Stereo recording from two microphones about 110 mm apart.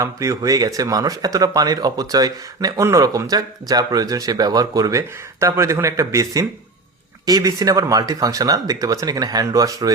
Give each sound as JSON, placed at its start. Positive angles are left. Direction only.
{"t": 0.0, "sound": "speech", "side_deg": -30}